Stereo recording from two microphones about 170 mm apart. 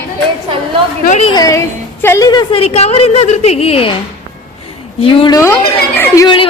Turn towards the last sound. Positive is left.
turn(degrees=25)  # may be behind; listen again after turning